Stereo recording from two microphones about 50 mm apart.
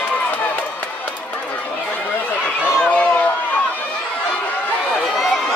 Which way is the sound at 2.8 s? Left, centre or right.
Left.